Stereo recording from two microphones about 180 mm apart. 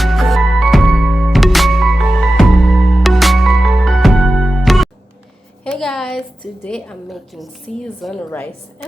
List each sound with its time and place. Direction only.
0.0 s music: centre (ahead or behind)
5.6 s a woman's voice: 5° left (ahead or behind)